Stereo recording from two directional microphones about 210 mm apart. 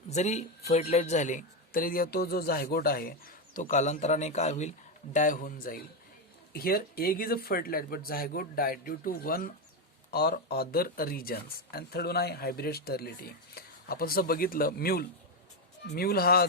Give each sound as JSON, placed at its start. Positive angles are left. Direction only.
{"t": 0.1, "sound": "speech", "side_deg": 35}